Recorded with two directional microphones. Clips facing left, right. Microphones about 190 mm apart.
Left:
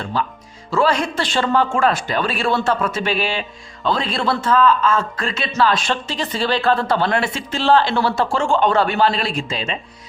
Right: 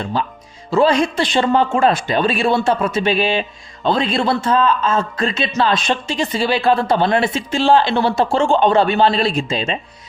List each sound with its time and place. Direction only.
0.7 s a man's voice: 20° right (ahead or behind)